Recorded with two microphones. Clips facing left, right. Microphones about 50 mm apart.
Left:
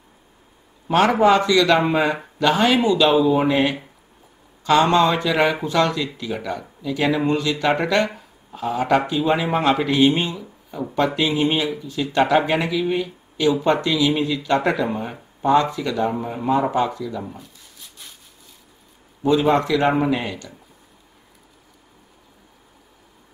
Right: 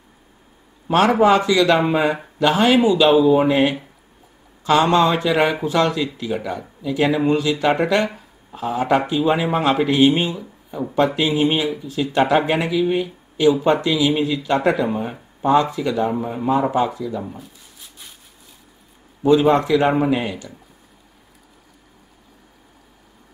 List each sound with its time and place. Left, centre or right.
0.8 s a man's voice: centre
3.2 s speech: centre
3.4 s speech: centre
7.3 s speech: centre
9.8 s speech: centre
15.4 s speech: centre
16.1 s speech: centre
19.2 s speech: centre